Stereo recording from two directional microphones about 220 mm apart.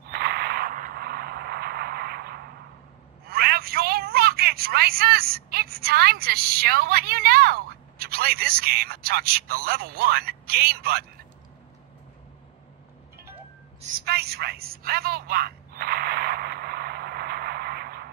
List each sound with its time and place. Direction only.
0.1 s mechanisms: 45° right (ahead or behind)
3.3 s telephone: 45° right (ahead or behind)
13.9 s a sound: 45° right (ahead or behind)